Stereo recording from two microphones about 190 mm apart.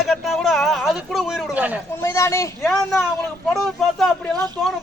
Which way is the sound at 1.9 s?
15° left (ahead or behind).